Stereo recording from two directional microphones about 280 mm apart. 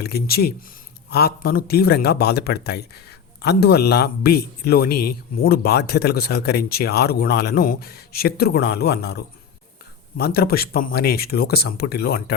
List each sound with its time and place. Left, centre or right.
0.0 s speech: left